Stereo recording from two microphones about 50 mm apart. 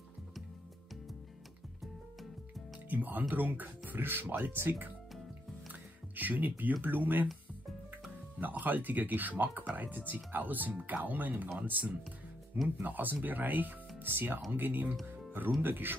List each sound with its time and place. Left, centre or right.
2.9 s speech: right
8.4 s speech: right